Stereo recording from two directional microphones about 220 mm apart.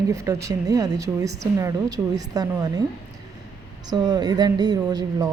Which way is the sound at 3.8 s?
20° right (ahead or behind).